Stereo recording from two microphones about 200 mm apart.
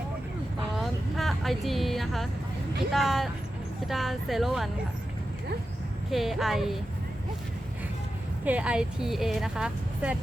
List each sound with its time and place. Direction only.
0.8 s a sound: centre (ahead or behind)
2.9 s speech: centre (ahead or behind)
6.1 s speech: centre (ahead or behind)
8.4 s speech: 5° right (ahead or behind)